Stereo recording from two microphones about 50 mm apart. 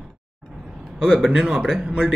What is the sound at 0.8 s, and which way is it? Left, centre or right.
A man's voice, centre.